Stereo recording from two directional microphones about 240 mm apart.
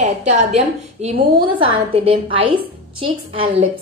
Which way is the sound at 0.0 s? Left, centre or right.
Right.